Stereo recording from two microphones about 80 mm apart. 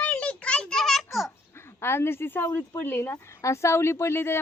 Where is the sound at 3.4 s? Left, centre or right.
Left.